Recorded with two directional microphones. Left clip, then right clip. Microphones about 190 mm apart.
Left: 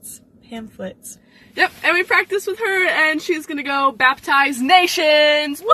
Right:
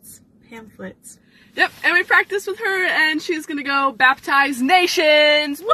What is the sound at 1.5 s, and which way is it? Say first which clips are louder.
Speech: even; 15° right (ahead or behind).